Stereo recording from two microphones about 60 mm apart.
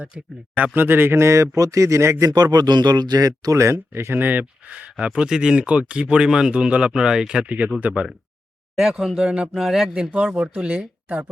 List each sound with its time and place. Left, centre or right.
0.5 s speech: right
0.9 s speech: right
2.3 s speech: right
3.6 s speech: right
4.7 s speech: centre
7.8 s speech: right
8.8 s speech: centre
9.2 s speech: centre